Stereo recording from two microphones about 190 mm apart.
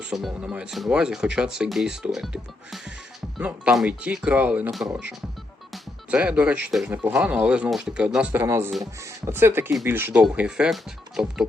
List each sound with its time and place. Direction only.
0.0 s speech: centre (ahead or behind)